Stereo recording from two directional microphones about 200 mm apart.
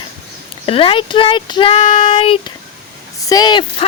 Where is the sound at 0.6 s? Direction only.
25° left (ahead or behind).